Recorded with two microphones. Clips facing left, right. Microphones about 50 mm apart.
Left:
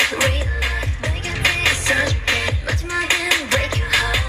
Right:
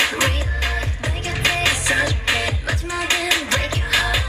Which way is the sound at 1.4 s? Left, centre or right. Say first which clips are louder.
Left 1 dB; centre.